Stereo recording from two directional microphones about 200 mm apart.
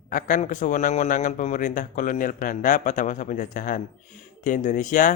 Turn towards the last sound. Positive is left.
turn(degrees=40)  # may be behind; listen again after turning